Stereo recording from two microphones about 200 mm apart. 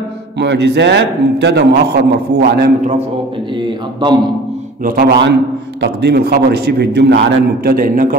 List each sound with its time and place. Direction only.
0.4 s a man's voice: 60° right (ahead or behind)
3.5 s speech: 20° right (ahead or behind)
4.8 s a man's voice: 50° right (ahead or behind)